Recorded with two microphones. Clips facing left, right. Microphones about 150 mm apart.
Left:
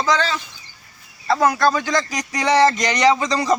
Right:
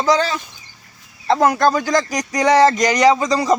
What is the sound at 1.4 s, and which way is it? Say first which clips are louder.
Speech: right 2 dB; 45° right (ahead or behind).